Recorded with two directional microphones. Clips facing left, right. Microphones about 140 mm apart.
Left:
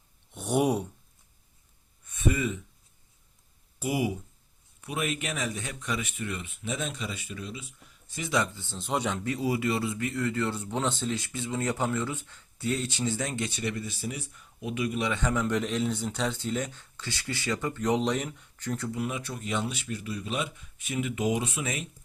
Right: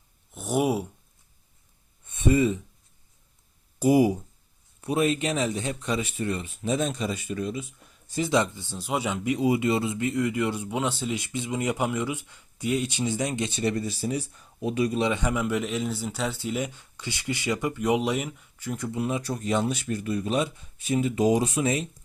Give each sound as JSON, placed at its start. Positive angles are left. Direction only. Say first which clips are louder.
{"t": 0.3, "sound": "speech", "louder": "right 1 dB", "side_deg": 0}
{"t": 2.0, "sound": "speech", "louder": "right 6 dB", "side_deg": -30}
{"t": 3.8, "sound": "speech", "louder": "right 9 dB", "side_deg": -40}
{"t": 8.1, "sound": "speech", "louder": "right 5 dB", "side_deg": -30}
{"t": 8.8, "sound": "speech", "louder": "right 2 dB", "side_deg": -5}
{"t": 13.5, "sound": "speech", "louder": "right 6 dB", "side_deg": -30}
{"t": 15.0, "sound": "speech", "louder": "right 3 dB", "side_deg": -15}
{"t": 18.9, "sound": "speech", "louder": "right 4 dB", "side_deg": -30}